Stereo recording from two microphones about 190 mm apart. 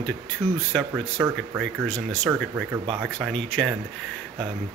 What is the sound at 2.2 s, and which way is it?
A man's voice, 10° right (ahead or behind).